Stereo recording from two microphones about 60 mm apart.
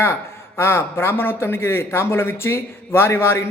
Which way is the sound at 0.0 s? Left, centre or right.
Left.